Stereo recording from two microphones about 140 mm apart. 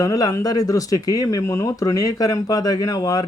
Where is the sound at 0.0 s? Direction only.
25° left (ahead or behind).